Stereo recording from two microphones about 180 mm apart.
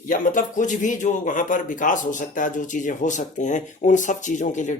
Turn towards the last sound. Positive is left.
turn(degrees=40)  # may be behind; listen again after turning